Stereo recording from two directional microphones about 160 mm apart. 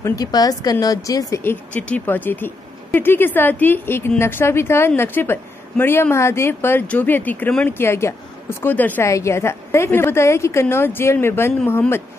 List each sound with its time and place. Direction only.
0.0 s speech: 25° left (ahead or behind)